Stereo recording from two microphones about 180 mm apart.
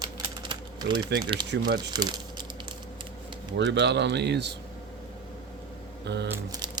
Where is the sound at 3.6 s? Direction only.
80° right.